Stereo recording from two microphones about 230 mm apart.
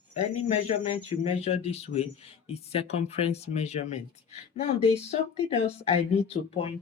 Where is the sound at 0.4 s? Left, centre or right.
Left.